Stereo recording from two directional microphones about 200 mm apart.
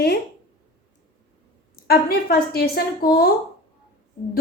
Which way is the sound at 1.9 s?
50° left (ahead or behind).